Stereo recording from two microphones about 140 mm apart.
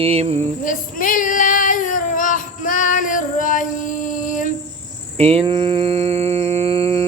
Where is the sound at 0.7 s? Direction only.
70° left (ahead or behind).